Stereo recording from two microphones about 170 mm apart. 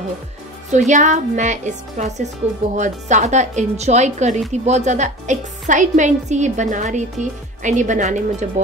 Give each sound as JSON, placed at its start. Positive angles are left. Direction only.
{"t": 0.7, "sound": "speech", "side_deg": -45}